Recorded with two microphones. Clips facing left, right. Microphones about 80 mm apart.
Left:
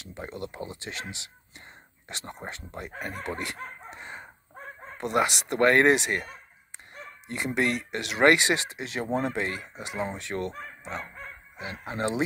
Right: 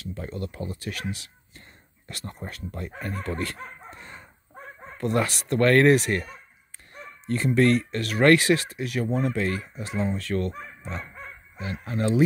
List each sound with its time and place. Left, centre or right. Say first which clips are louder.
0.0 s speech: right 3 dB; left
3.0 s dog: right 3 dB; centre
4.9 s speech: even; centre
10.8 s bow-wow: left 1 dB; centre
11.8 s speech: right 4 dB; left